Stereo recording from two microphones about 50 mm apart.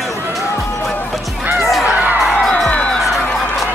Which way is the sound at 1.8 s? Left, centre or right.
Right.